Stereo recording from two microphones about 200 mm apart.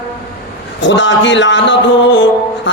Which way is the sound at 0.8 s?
65° left (ahead or behind).